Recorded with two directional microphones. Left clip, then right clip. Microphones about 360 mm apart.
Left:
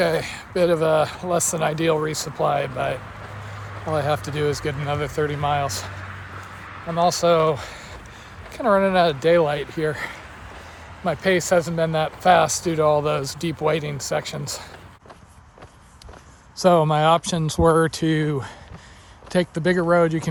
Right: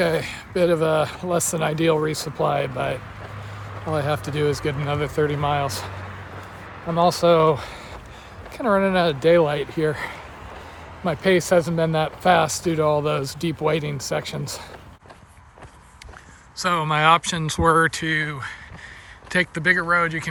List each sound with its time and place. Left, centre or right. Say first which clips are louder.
0.0 s speech: left 1 dB; centre
6.9 s speech: right 1 dB; centre
16.6 s speech: left 4 dB; centre